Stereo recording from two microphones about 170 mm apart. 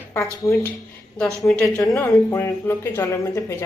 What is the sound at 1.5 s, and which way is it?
Speech, 5° left (ahead or behind).